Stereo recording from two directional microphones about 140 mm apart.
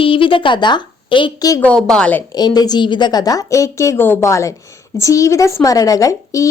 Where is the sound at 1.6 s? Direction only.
5° left (ahead or behind).